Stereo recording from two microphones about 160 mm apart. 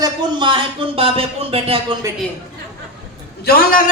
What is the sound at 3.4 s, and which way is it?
Speech, 65° left (ahead or behind).